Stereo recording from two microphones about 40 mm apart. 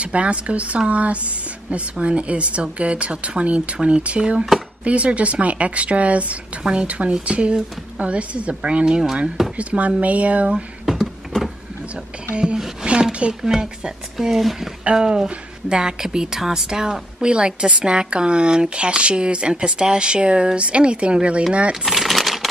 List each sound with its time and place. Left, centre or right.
0.0 s a woman's voice: right
10.9 s a sound: centre
12.8 s a sound: right
13.3 s speech: centre
14.9 s a woman's voice: centre
21.8 s crumpling: centre